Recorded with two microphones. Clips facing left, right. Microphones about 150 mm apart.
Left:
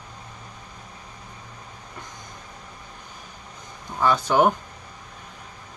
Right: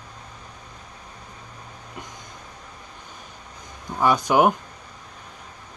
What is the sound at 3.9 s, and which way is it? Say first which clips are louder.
Speech: right 1 dB; 15° right (ahead or behind).